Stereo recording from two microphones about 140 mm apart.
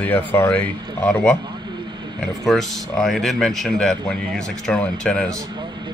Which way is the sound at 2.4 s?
Centre (ahead or behind).